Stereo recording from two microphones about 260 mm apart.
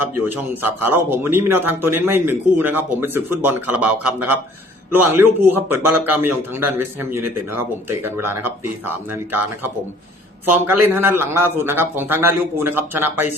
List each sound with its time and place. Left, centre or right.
0.0 s a man's voice: right
0.9 s speech: centre
10.5 s speech: centre